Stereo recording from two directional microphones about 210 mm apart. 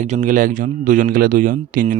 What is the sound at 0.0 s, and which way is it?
A man's voice, 35° right (ahead or behind).